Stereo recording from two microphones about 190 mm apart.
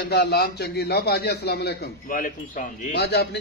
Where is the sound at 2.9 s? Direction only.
60° left (ahead or behind).